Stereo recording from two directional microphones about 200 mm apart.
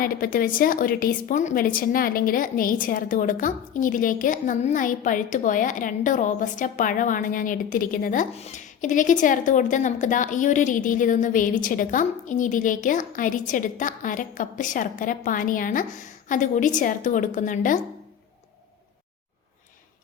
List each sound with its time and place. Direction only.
0.0 s a woman's voice: 45° left (ahead or behind)